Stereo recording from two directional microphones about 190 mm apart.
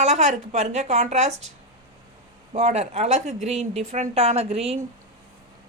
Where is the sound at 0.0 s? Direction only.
35° right (ahead or behind).